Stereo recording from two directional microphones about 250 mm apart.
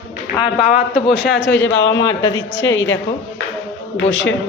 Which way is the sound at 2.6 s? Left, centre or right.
Left.